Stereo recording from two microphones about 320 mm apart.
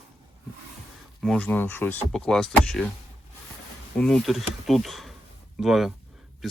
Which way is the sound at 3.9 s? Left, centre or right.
Centre.